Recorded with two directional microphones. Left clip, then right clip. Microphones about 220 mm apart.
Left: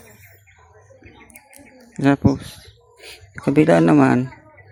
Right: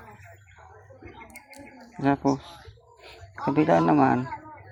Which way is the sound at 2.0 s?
50° left (ahead or behind).